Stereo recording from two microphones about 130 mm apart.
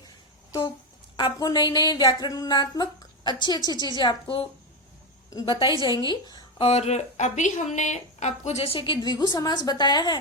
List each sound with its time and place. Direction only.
1.1 s a woman's voice: 30° left (ahead or behind)
6.7 s speech: 55° left (ahead or behind); by 10.2 s 35° left (ahead or behind)